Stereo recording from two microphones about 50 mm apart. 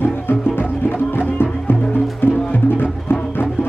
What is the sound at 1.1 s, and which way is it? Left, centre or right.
Music, left.